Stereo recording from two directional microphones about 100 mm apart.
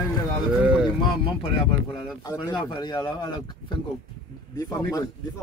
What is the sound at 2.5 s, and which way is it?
Speech, 50° left (ahead or behind).